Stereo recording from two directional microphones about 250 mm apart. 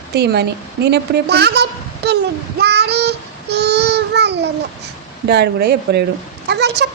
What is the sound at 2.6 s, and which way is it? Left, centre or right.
Child singing, right.